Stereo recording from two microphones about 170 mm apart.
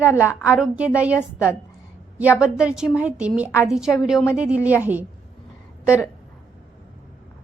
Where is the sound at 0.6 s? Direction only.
5° right (ahead or behind).